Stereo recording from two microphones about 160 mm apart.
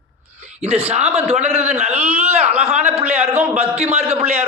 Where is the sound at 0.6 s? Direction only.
40° right (ahead or behind).